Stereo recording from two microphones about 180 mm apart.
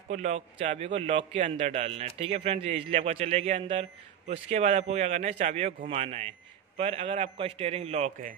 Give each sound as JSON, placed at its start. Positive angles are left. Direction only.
{"t": 0.1, "sound": "a man's voice", "side_deg": -40}